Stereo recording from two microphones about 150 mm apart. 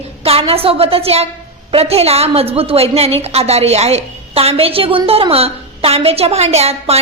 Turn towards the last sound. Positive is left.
turn(degrees=-45)  # may be behind; listen again after turning